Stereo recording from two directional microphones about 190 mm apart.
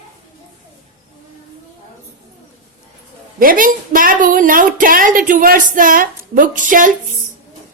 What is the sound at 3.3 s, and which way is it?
Speech, 45° right (ahead or behind).